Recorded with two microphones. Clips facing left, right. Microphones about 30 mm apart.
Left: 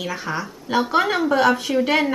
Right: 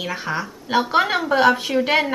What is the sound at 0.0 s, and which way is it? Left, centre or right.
A woman's voice, centre.